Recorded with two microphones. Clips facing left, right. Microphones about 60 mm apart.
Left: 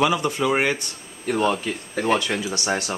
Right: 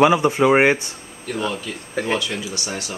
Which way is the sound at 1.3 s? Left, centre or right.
Left.